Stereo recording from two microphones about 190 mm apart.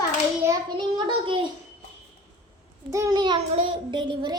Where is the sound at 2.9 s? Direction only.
20° right (ahead or behind).